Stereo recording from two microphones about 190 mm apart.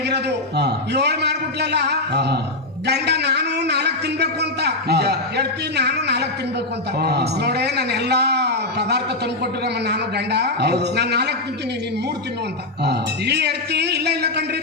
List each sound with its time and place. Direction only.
0.1 s a man's voice: 60° right (ahead or behind)
12.8 s a man's voice: 60° right (ahead or behind)